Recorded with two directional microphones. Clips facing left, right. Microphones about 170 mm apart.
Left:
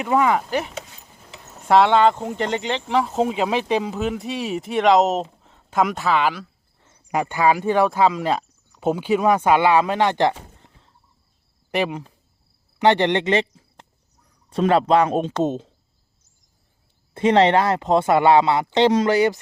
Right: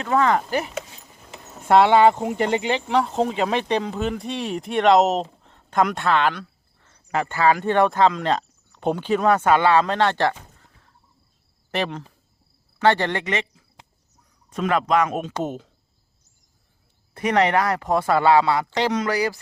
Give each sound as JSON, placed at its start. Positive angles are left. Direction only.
{"t": 0.0, "sound": "speech", "side_deg": 10}
{"t": 11.7, "sound": "speech", "side_deg": 10}
{"t": 17.2, "sound": "speech", "side_deg": 25}